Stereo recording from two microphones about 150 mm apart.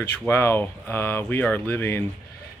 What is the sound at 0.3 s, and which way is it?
Speech, 15° left (ahead or behind).